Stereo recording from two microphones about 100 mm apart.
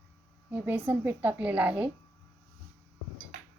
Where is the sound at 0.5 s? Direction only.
20° right (ahead or behind).